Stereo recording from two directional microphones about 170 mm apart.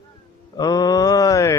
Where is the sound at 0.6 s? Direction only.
20° left (ahead or behind).